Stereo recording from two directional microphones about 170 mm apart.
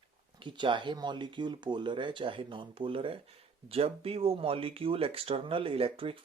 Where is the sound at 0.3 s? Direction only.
25° right (ahead or behind).